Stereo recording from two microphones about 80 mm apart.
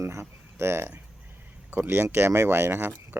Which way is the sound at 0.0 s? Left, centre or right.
Right.